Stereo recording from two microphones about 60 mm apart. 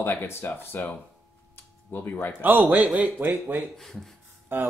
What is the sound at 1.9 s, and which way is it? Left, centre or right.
Speech, left.